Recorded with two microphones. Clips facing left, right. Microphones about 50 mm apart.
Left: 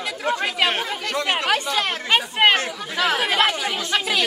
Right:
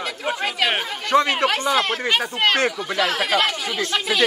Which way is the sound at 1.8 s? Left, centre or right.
Centre.